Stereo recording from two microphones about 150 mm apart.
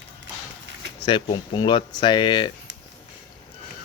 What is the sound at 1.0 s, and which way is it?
Speech, 30° left (ahead or behind).